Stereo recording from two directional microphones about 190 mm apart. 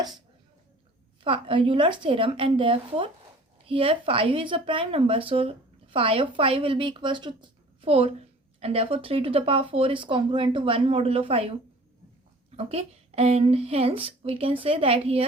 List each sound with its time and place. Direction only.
1.2 s speech: 25° right (ahead or behind)